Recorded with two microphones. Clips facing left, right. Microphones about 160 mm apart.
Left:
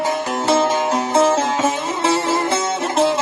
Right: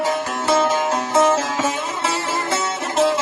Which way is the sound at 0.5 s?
20° left (ahead or behind).